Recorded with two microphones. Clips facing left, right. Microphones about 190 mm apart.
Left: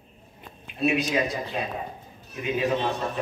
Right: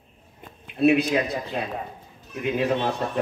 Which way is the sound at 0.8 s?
60° right (ahead or behind).